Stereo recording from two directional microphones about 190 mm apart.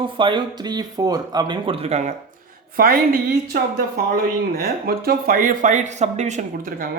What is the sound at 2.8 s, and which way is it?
Speech, 50° right (ahead or behind).